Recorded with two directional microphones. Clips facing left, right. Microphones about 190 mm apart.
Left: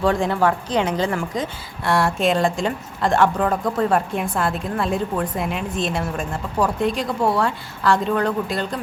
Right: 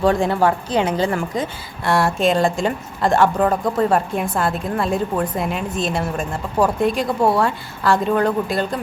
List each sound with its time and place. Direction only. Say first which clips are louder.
0.0 s a woman's voice: right 2 dB; 35° right (ahead or behind)
0.9 s a woman's voice: right 2 dB; 10° right (ahead or behind)